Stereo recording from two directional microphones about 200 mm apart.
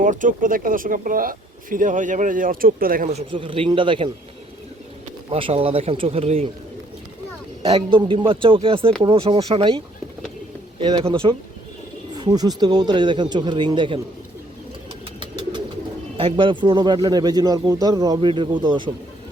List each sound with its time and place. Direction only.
0.0 s speech: 40° right (ahead or behind); by 4.1 s 25° right (ahead or behind)
5.3 s speech: 30° right (ahead or behind)
7.6 s speech: 25° right (ahead or behind)
15.2 s pigeon: 25° right (ahead or behind)
16.1 s speech: 25° right (ahead or behind)